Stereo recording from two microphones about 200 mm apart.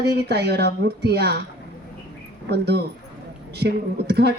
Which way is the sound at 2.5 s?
55° right (ahead or behind).